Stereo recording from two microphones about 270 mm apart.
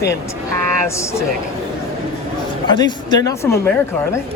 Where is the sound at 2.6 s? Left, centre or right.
Centre.